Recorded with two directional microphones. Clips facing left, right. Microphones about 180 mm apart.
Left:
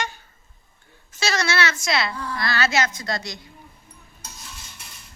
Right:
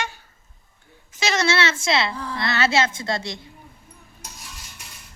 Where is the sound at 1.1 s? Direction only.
20° right (ahead or behind).